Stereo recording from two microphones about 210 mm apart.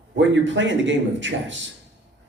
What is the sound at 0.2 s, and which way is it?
Speech, 60° right (ahead or behind).